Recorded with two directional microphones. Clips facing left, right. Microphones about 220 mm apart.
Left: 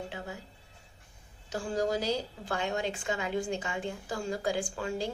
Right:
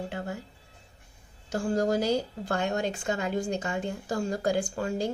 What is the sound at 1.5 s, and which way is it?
A woman's voice, 45° right (ahead or behind).